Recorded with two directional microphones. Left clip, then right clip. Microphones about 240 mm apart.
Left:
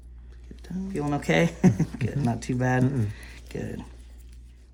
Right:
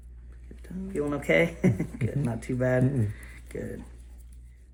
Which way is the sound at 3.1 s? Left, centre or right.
Left.